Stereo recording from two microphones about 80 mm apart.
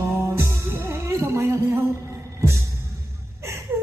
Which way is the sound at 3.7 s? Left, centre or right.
Right.